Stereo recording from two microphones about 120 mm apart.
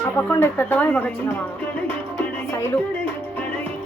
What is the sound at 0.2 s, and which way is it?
A woman's voice, 20° left (ahead or behind).